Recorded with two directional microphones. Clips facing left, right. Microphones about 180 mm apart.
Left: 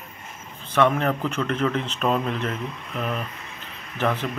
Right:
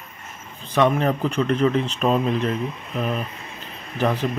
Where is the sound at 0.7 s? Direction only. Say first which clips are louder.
Right 2 dB; 15° right (ahead or behind).